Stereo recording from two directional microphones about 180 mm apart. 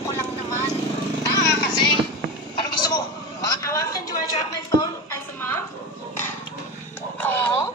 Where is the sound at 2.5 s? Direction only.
20° left (ahead or behind).